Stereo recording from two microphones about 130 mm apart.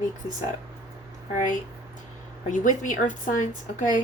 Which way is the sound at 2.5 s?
75° left (ahead or behind).